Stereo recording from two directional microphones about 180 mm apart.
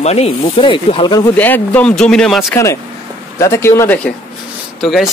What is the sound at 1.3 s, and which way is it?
Speech, 10° left (ahead or behind).